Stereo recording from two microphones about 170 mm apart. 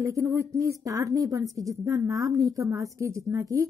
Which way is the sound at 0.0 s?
20° right (ahead or behind).